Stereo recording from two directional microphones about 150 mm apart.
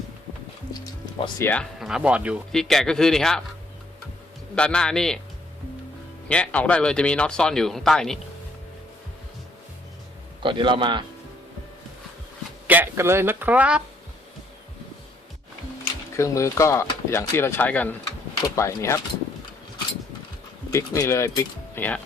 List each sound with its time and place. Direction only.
1.4 s speech: 15° left (ahead or behind)
1.8 s speech: 5° right (ahead or behind)
2.5 s speech: 5° left (ahead or behind)
4.5 s speech: 5° left (ahead or behind)
6.2 s speech: 10° left (ahead or behind)
10.4 s a man's voice: 35° right (ahead or behind)
12.6 s speech: 10° right (ahead or behind)
16.1 s speech: 20° left (ahead or behind)
20.7 s speech: 20° left (ahead or behind)